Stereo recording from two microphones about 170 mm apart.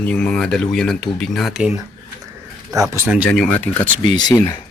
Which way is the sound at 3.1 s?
Centre (ahead or behind).